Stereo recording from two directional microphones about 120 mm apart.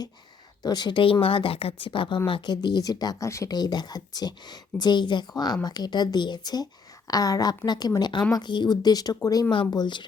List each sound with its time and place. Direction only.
0.6 s speech: 35° left (ahead or behind)
9.5 s speech: 40° left (ahead or behind)